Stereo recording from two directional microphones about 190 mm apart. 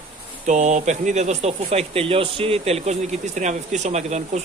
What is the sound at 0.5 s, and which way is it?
Speech, 40° right (ahead or behind).